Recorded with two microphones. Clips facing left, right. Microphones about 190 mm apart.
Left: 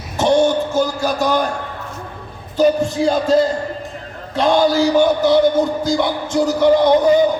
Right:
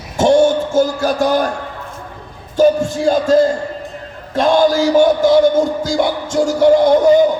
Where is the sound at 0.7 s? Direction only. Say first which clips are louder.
Right 3 dB; 50° right (ahead or behind).